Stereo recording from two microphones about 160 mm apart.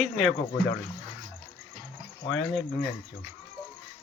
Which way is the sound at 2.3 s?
Centre (ahead or behind).